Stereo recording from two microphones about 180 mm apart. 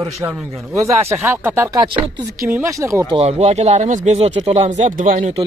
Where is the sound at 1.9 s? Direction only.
25° right (ahead or behind).